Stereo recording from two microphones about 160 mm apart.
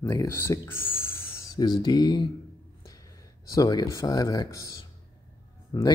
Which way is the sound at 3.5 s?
25° left (ahead or behind).